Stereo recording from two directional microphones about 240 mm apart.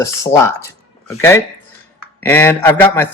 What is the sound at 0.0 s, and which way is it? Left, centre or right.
Speech, centre.